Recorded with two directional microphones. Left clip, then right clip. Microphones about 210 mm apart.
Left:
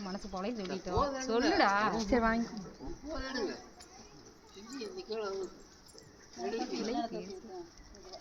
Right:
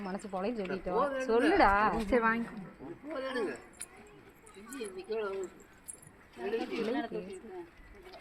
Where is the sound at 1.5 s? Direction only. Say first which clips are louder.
Right 3 dB; 35° right (ahead or behind).